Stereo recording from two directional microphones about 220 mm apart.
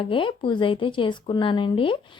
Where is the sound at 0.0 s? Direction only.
25° left (ahead or behind).